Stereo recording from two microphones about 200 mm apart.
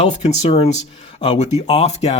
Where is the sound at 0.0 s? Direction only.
35° left (ahead or behind).